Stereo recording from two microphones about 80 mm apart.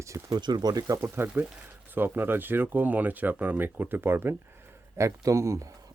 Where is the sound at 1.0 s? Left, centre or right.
Right.